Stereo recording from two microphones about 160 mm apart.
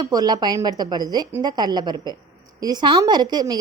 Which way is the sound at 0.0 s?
25° right (ahead or behind).